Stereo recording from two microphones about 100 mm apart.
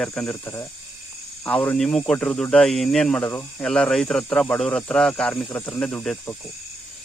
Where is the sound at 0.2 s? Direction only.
15° left (ahead or behind).